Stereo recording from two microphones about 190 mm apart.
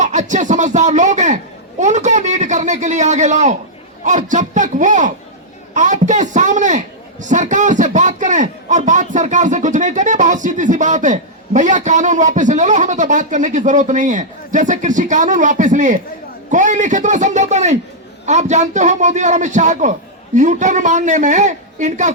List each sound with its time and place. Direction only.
0.0 s a man's voice: 40° right (ahead or behind)